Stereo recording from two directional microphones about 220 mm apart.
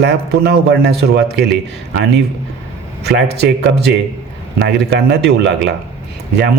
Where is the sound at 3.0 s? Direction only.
50° right (ahead or behind).